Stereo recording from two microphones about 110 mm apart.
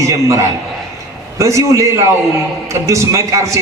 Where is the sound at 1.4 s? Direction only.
30° right (ahead or behind).